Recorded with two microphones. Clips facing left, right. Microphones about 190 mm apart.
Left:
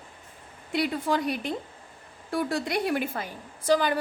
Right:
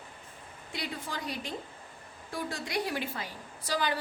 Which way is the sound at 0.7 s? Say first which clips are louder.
Left 12 dB; 60° left (ahead or behind).